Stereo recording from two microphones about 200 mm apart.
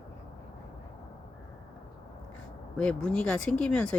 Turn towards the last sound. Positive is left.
turn(degrees=5)  # may be behind; listen again after turning